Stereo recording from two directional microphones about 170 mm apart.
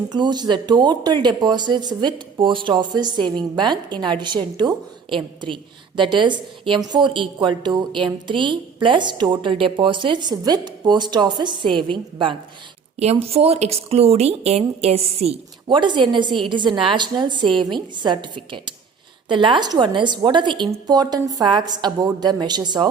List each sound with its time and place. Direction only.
0.1 s a woman's voice: 25° right (ahead or behind)